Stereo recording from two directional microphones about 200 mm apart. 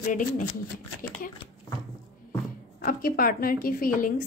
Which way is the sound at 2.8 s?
45° left (ahead or behind).